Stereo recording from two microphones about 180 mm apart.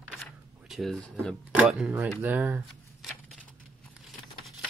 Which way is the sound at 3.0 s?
Centre (ahead or behind).